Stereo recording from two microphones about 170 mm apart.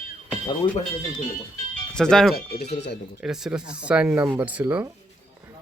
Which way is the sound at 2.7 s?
90° left.